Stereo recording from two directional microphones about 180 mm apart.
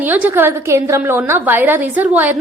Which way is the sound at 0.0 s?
10° right (ahead or behind).